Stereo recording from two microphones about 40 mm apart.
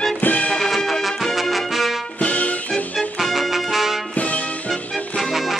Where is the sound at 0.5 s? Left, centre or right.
Centre.